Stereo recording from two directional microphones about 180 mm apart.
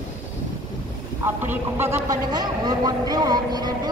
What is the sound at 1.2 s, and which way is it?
A man's voice, 15° right (ahead or behind).